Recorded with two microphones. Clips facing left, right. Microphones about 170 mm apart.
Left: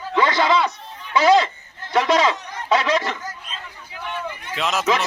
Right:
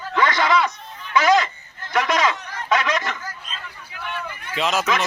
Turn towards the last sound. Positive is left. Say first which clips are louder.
# right 1 dB
turn(degrees=0)  # may be behind; listen again after turning